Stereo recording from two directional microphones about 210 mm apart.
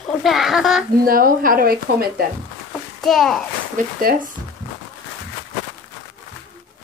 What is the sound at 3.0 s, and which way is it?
Speech, centre (ahead or behind).